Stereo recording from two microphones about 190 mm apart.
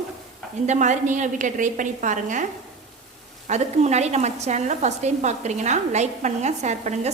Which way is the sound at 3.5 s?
35° right (ahead or behind).